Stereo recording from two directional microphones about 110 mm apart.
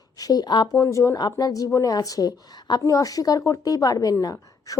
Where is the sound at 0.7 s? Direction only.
30° left (ahead or behind).